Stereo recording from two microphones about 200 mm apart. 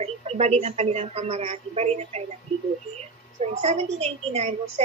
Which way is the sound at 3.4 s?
30° right (ahead or behind).